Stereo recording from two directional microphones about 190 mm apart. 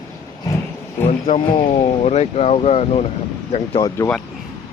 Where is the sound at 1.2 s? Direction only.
30° left (ahead or behind).